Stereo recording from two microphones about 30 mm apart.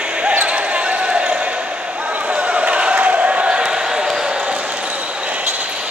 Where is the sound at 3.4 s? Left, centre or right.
Right.